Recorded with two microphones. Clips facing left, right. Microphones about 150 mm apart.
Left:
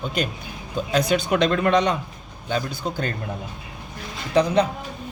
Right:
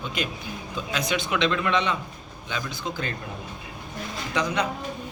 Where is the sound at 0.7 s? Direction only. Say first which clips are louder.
Left 7 dB; 35° left (ahead or behind).